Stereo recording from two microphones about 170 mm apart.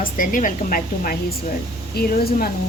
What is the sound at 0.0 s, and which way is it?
A woman's voice, 55° left (ahead or behind).